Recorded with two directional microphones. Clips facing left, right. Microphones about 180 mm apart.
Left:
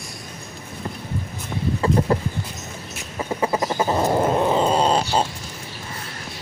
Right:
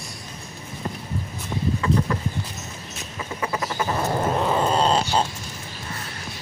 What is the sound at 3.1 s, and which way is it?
Bird, 30° left (ahead or behind).